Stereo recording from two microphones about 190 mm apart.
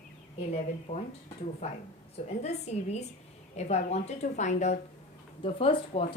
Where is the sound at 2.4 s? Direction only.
35° left (ahead or behind).